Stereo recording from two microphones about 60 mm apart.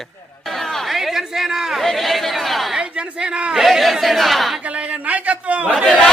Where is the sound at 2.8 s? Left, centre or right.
Centre.